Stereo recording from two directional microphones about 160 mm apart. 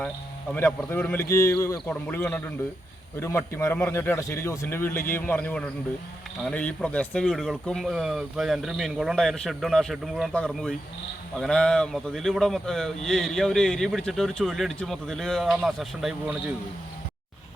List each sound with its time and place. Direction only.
0.5 s a man's voice: 15° left (ahead or behind); by 16.4 s 5° right (ahead or behind)